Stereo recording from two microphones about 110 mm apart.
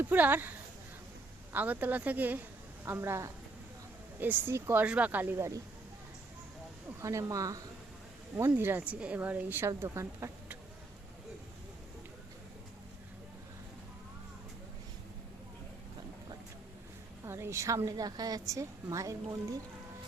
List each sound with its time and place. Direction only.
0.0 s speech: 15° right (ahead or behind)
1.5 s a woman's voice: 15° right (ahead or behind)
7.0 s a woman's voice: 30° right (ahead or behind)
8.4 s a woman's voice: 20° right (ahead or behind)
17.2 s a woman's voice: 25° right (ahead or behind)